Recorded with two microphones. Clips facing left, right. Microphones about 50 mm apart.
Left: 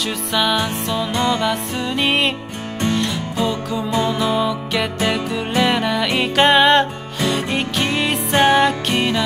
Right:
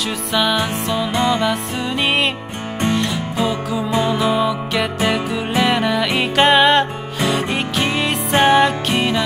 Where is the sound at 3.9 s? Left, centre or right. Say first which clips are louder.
Right 1 dB; centre.